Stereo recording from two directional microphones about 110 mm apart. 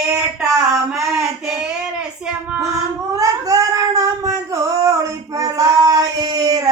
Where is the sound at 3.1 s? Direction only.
30° right (ahead or behind).